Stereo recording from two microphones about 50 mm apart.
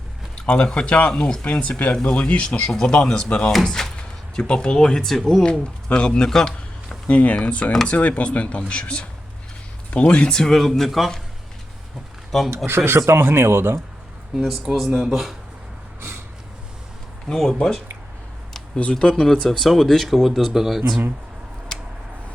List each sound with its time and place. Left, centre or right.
0.4 s speech: left
3.8 s speech: centre
5.5 s speech: left
7.1 s speech: left; by 11.1 s centre
12.6 s speech: right
14.3 s speech: centre
17.2 s speech: centre
19.2 s speech: centre